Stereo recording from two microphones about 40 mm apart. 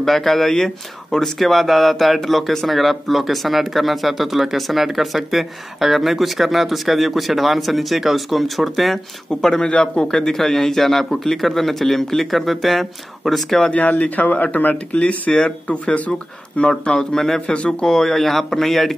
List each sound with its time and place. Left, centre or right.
0.0 s a man's voice: centre
9.6 s speech: left
10.1 s speech: centre
13.7 s speech: left; by 17.4 s centre
17.5 s speech: left
17.9 s a man's voice: centre